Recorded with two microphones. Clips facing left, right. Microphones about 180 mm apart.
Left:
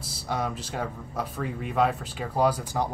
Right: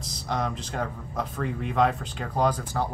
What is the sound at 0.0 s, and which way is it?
A man's voice, 5° left (ahead or behind).